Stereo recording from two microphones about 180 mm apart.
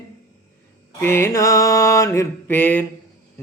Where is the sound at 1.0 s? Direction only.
15° left (ahead or behind).